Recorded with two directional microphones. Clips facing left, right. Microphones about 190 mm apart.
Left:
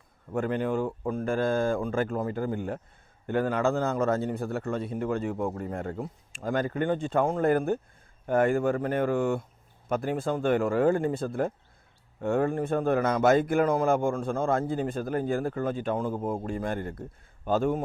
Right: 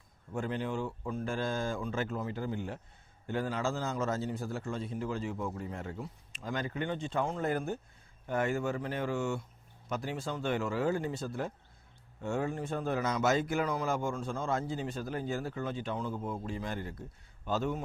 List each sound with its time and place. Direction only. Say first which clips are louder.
0.3 s a man's voice: left 7 dB; 60° left (ahead or behind)